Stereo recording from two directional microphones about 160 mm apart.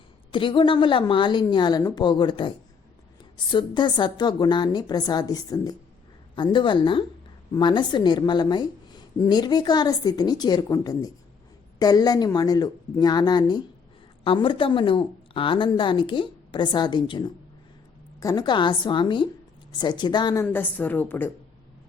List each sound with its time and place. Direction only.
0.3 s a woman's voice: 30° left (ahead or behind); by 21.3 s 10° left (ahead or behind)